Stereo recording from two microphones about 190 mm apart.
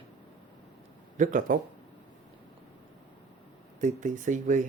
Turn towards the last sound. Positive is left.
turn(degrees=-40)  # may be behind; listen again after turning